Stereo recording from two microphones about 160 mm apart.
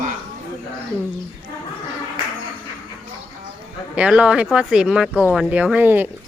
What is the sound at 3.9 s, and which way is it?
Speech, 5° right (ahead or behind).